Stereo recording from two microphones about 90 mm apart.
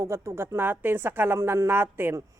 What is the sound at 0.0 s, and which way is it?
Speech, 30° right (ahead or behind).